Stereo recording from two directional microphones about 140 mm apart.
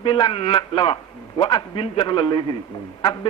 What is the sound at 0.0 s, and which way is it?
A man's voice, 35° left (ahead or behind).